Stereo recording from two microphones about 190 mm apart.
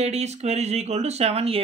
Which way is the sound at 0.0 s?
35° right (ahead or behind).